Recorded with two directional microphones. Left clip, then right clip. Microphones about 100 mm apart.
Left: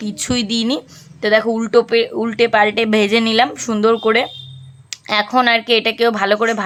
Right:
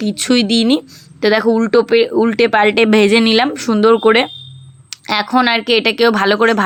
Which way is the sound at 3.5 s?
20° right (ahead or behind).